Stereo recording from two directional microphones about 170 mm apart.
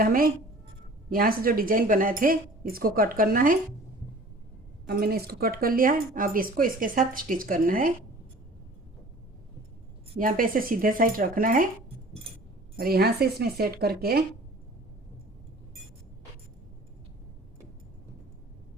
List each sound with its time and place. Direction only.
0.0 s speech: 55° right (ahead or behind)
4.9 s speech: 65° right (ahead or behind)
10.2 s speech: 55° right (ahead or behind)
12.7 s speech: 65° right (ahead or behind)